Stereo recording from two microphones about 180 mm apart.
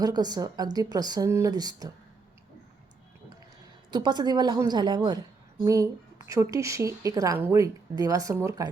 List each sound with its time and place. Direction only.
0.0 s speech: 20° right (ahead or behind)
3.9 s a woman's voice: 25° right (ahead or behind)